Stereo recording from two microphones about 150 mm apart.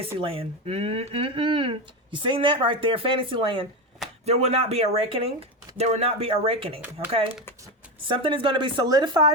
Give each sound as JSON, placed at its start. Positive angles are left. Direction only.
{"t": 0.0, "sound": "speech", "side_deg": -40}
{"t": 4.3, "sound": "speech", "side_deg": -45}
{"t": 8.0, "sound": "speech", "side_deg": -35}